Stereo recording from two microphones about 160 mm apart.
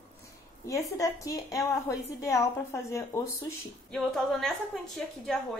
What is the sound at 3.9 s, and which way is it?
Speech, centre (ahead or behind).